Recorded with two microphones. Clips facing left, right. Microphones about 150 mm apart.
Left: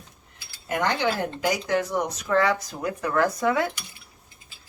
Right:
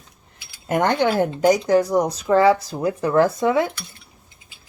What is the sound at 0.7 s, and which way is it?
Speech, 50° right (ahead or behind).